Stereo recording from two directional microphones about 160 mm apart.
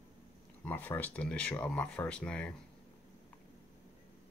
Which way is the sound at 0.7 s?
10° left (ahead or behind).